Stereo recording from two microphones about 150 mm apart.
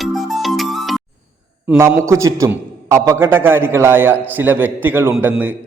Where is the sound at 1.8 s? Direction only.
15° right (ahead or behind).